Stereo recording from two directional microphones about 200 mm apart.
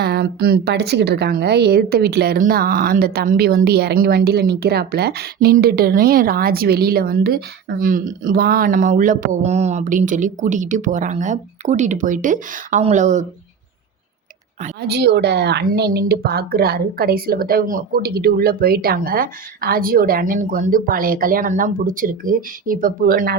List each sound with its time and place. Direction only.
0.0 s a woman's voice: 55° right (ahead or behind); by 13.2 s 35° right (ahead or behind)
14.8 s a woman's voice: 55° right (ahead or behind)